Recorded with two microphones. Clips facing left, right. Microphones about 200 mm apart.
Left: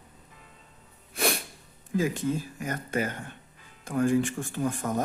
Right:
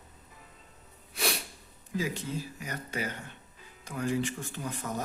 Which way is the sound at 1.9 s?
50° left (ahead or behind).